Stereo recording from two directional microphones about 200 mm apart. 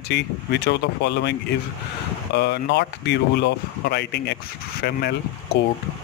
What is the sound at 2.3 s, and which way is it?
Speech, 55° left (ahead or behind).